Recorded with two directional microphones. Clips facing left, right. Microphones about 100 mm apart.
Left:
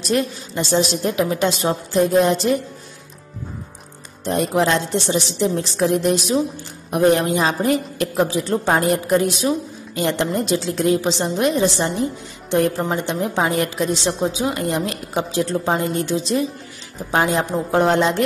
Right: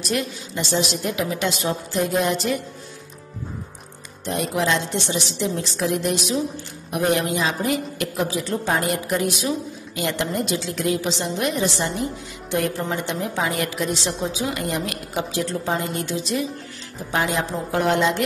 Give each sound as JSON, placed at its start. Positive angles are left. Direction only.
{"t": 0.0, "sound": "a woman's voice", "side_deg": 35}
{"t": 4.3, "sound": "a woman's voice", "side_deg": 40}